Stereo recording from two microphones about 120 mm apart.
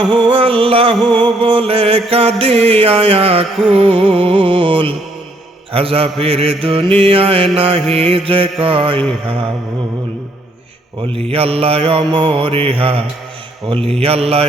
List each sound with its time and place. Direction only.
0.1 s music: 45° right (ahead or behind)
11.1 s music: 55° right (ahead or behind)
14.0 s mantra: 55° right (ahead or behind)